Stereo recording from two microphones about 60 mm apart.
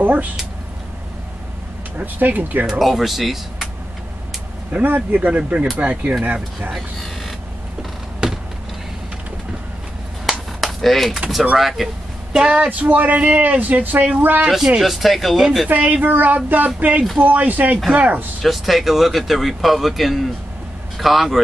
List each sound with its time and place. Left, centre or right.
0.0 s speech: right
2.0 s speech: right
2.8 s speech: centre
4.7 s speech: right
6.7 s vehicle: centre
8.2 s a sound: centre
10.6 s a sound: centre
11.5 s speech: centre
12.3 s speech: centre
14.4 s speech: centre
15.7 s speech: right
18.4 s speech: centre